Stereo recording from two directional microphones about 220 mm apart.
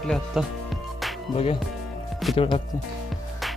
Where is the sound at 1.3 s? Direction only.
25° left (ahead or behind).